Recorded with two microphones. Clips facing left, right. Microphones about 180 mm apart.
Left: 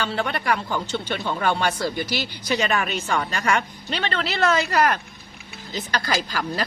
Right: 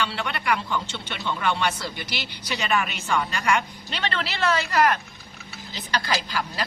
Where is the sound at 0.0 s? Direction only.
40° left (ahead or behind).